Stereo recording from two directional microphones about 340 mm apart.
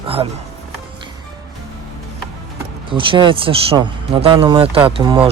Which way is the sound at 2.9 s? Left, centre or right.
Centre.